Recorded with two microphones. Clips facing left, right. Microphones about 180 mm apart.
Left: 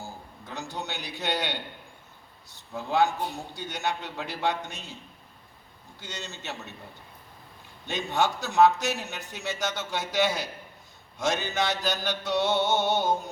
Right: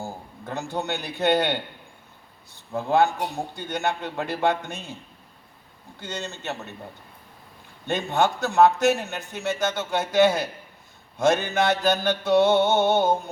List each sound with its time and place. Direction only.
0.0 s a man's voice: 55° right (ahead or behind)
6.0 s a man's voice: 55° right (ahead or behind)
7.9 s a man's voice: 55° right (ahead or behind)